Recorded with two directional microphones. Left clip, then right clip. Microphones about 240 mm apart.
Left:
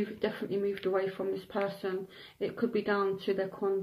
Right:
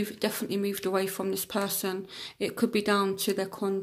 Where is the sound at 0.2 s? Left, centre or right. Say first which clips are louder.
Right 2 dB; right.